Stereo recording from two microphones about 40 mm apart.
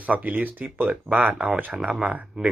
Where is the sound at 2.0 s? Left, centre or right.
Right.